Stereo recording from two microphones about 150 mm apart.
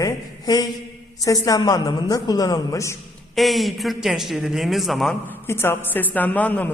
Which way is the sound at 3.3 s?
Centre (ahead or behind).